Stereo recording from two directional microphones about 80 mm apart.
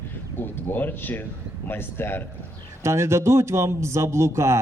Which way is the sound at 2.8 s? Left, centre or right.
Right.